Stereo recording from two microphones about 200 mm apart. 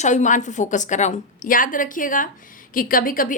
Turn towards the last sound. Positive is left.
turn(degrees=45)  # may be behind; listen again after turning